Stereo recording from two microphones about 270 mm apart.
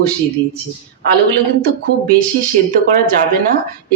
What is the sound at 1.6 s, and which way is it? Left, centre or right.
Speech, right.